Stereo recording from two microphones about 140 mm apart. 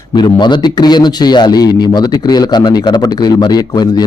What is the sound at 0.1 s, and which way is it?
A man's voice, 30° left (ahead or behind).